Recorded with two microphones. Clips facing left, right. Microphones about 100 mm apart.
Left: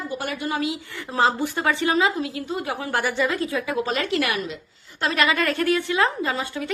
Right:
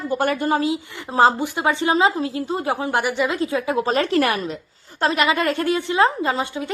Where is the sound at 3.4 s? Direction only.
25° right (ahead or behind).